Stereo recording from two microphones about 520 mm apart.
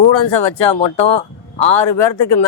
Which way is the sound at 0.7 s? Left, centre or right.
Left.